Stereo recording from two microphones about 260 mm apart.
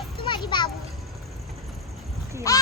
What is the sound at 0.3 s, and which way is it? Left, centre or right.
Children playing, centre.